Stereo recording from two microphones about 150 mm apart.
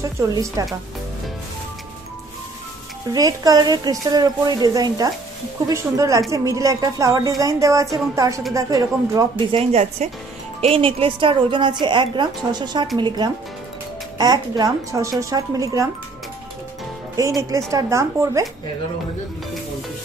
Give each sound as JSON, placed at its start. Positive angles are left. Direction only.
{"t": 0.0, "sound": "a woman's voice", "side_deg": -20}
{"t": 3.1, "sound": "a woman's voice", "side_deg": -25}
{"t": 9.6, "sound": "a woman's voice", "side_deg": -45}
{"t": 17.4, "sound": "a woman's voice", "side_deg": -20}